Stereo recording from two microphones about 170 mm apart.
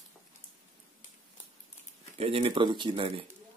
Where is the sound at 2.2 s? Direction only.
35° right (ahead or behind).